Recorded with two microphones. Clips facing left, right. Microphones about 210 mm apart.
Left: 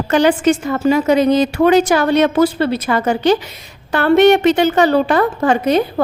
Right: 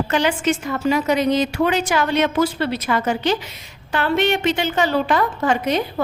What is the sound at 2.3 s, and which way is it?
Speech, 55° left (ahead or behind).